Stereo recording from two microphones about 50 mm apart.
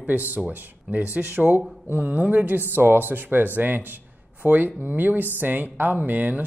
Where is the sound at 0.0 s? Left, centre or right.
Right.